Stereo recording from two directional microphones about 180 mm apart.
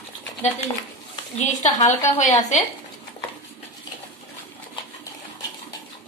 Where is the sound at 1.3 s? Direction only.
40° left (ahead or behind).